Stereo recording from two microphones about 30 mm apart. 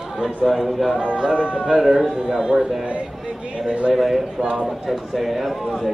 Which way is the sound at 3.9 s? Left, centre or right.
Centre.